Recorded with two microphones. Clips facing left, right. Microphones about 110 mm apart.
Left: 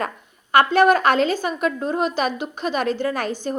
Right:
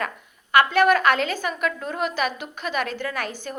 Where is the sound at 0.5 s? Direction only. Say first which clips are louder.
Left 3 dB; 30° left (ahead or behind).